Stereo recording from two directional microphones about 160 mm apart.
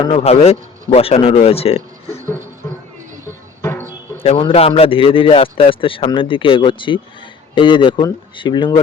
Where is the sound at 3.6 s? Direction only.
15° left (ahead or behind).